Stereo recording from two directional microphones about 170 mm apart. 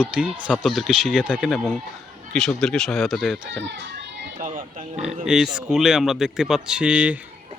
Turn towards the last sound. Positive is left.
turn(degrees=-5)  # may be behind; listen again after turning